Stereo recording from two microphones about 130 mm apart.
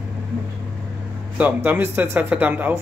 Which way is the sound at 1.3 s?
15° right (ahead or behind).